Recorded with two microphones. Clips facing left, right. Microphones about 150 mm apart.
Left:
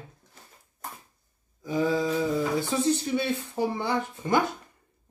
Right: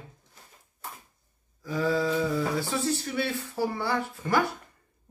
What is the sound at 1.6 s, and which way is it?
Speech, 20° left (ahead or behind).